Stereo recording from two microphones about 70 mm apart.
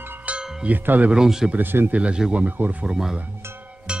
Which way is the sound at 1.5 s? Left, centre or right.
Right.